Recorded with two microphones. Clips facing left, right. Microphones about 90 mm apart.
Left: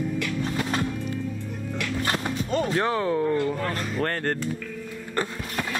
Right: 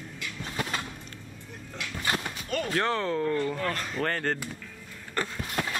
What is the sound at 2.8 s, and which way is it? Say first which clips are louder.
Speech: left 1 dB; 10° left (ahead or behind).